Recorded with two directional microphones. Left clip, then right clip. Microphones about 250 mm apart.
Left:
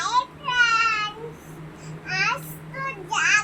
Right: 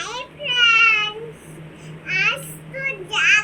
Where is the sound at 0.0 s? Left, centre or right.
Centre.